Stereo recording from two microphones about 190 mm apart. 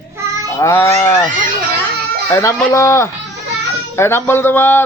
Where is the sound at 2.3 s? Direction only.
15° left (ahead or behind).